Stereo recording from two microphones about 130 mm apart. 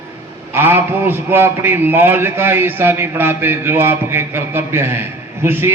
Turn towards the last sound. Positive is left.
turn(degrees=-20)  # may be behind; listen again after turning